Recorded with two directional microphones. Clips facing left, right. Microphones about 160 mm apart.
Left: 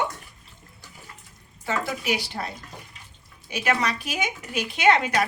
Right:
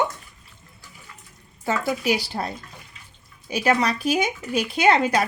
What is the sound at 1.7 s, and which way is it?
Speech, 35° right (ahead or behind).